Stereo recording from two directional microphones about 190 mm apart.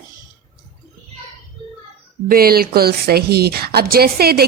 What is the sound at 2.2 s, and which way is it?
A woman's voice, 50° right (ahead or behind).